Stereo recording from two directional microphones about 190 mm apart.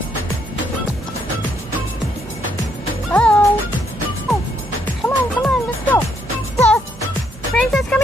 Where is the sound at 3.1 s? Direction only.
5° left (ahead or behind).